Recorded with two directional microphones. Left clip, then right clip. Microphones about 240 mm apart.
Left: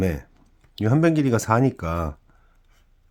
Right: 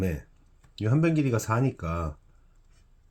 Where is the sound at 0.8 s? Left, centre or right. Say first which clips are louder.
Left 6 dB; left.